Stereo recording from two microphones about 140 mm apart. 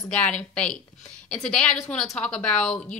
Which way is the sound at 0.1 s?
10° left (ahead or behind).